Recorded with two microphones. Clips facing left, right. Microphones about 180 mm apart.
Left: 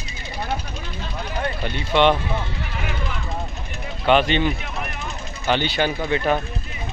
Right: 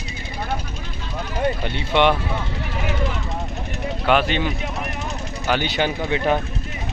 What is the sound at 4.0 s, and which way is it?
Speech, 5° right (ahead or behind).